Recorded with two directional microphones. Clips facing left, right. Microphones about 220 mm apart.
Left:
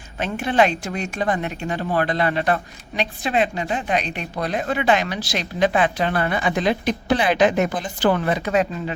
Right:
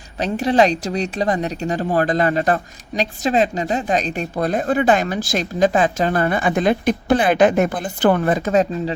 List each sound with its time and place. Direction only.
0.2 s a woman's voice: 35° right (ahead or behind)